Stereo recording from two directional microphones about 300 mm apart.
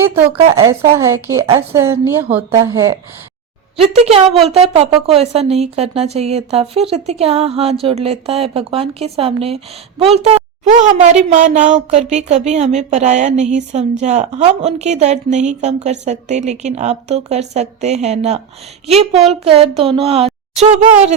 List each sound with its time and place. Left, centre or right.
0.7 s a woman's voice: centre
3.8 s a woman's voice: right